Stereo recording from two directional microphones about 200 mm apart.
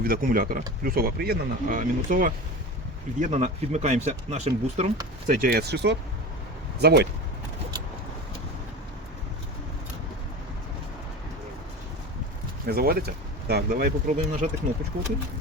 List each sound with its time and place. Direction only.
0.0 s speech: 45° right (ahead or behind)
5.3 s speech: 45° right (ahead or behind)
12.6 s speech: 50° right (ahead or behind)